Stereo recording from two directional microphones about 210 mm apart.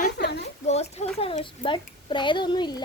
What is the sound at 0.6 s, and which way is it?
A child's voice, 30° left (ahead or behind).